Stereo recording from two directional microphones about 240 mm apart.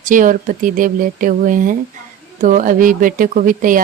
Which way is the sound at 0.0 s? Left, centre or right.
Right.